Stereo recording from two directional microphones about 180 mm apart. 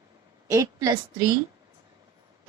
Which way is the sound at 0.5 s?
20° right (ahead or behind).